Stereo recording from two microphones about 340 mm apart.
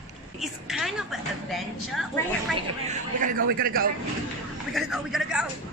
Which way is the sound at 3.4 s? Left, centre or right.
Right.